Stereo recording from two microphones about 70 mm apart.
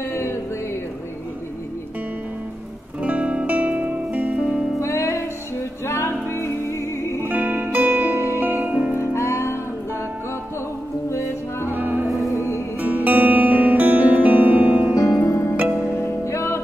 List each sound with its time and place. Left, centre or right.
0.1 s music: left
3.0 s music: right
4.8 s music: left
7.2 s music: right
9.0 s music: left
11.7 s music: right
12.4 s music: left
12.8 s music: right
15.0 s music: left